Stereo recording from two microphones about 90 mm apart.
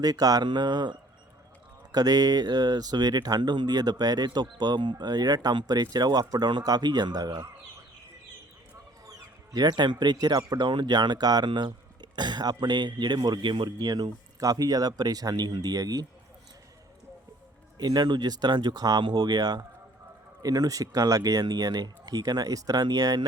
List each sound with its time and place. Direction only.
0.0 s speech: 45° right (ahead or behind)
9.0 s speech: 45° right (ahead or behind)
17.7 s speech: 50° right (ahead or behind)